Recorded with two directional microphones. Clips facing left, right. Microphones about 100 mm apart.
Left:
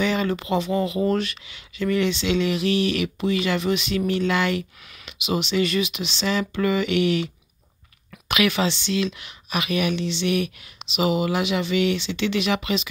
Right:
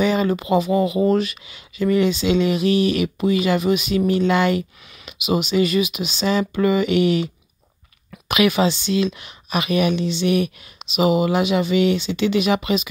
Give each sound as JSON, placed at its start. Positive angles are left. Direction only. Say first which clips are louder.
{"t": 0.0, "sound": "speech", "louder": "right 4 dB", "side_deg": -20}
{"t": 1.5, "sound": "speech", "louder": "right 5 dB", "side_deg": -20}
{"t": 6.2, "sound": "speech", "louder": "right 4 dB", "side_deg": -25}
{"t": 8.3, "sound": "speech", "louder": "right 4 dB", "side_deg": -20}